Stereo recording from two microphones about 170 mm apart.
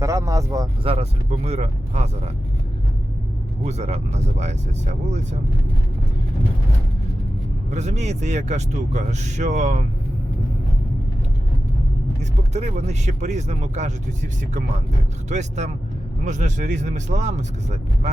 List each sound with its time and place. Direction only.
0.0 s speech: 20° right (ahead or behind)
0.9 s speech: 35° right (ahead or behind)
3.6 s speech: 40° right (ahead or behind)
7.7 s speech: 40° right (ahead or behind)
12.2 s speech: 40° right (ahead or behind)
15.3 s speech: 45° right (ahead or behind)